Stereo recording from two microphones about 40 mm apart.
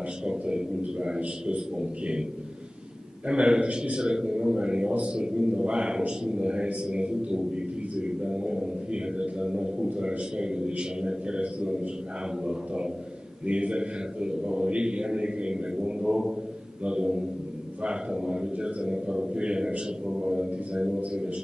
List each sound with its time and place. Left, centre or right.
0.2 s a sound: right
1.8 s a man's voice: centre
3.3 s a man's voice: right